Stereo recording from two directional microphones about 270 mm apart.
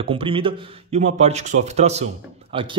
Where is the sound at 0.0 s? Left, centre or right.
Centre.